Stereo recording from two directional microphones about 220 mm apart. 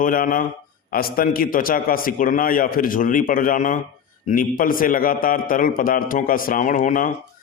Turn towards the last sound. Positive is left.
turn(degrees=35)  # may be behind; listen again after turning